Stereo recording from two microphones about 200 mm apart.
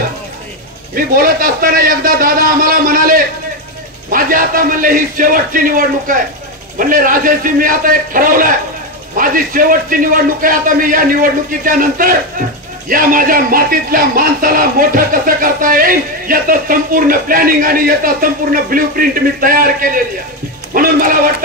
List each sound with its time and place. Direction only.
0.9 s speech: 45° right (ahead or behind)